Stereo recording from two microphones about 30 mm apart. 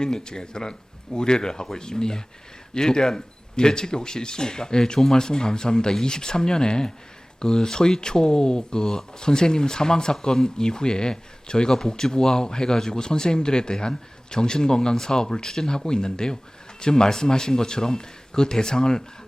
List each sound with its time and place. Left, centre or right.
0.0 s speech: left